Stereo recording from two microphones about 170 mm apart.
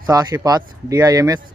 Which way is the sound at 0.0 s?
20° right (ahead or behind).